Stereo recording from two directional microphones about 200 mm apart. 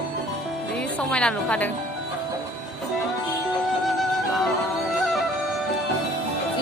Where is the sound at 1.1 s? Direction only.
5° left (ahead or behind).